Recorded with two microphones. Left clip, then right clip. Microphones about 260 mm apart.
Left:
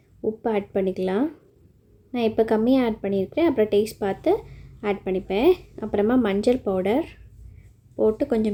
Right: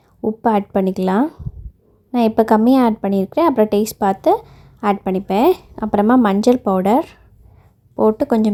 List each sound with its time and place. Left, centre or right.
0.2 s a woman's voice: right